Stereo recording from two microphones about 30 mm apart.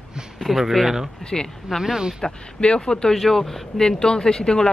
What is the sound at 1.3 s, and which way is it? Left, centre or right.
Speech, centre.